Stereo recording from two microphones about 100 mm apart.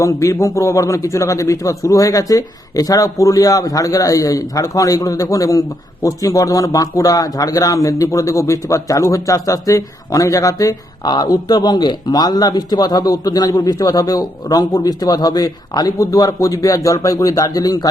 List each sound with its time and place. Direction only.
0.0 s a man's voice: 30° left (ahead or behind)